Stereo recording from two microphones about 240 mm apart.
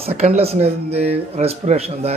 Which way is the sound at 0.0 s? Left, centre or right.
Right.